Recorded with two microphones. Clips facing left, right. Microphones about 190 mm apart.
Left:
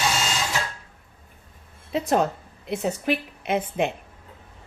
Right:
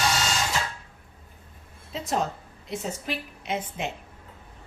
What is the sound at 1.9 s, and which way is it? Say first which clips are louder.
A woman's voice: left 6 dB; 65° left (ahead or behind).